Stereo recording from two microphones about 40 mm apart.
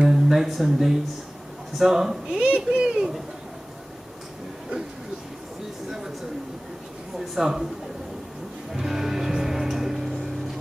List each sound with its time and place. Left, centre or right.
0.1 s a sound: centre
1.8 s speech: centre
2.3 s a sound: right
5.9 s speech: centre
7.2 s speech: centre
8.7 s music: centre